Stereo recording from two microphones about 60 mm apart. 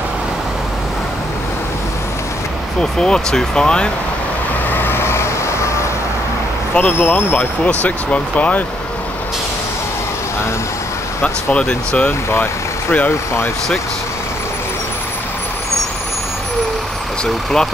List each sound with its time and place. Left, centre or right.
2.8 s speech: centre
4.6 s vehicle: left
6.8 s speech: left
11.2 s speech: centre
12.1 s speech: left
17.2 s speech: centre